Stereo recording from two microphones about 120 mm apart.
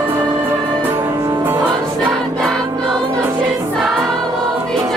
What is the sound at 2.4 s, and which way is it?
Choir, 5° left (ahead or behind).